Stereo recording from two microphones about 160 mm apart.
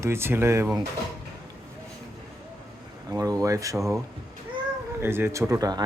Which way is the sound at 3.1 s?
20° right (ahead or behind).